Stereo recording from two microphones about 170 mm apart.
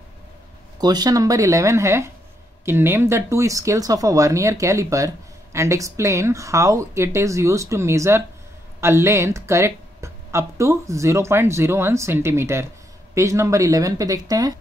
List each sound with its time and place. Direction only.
0.7 s speech: 25° right (ahead or behind)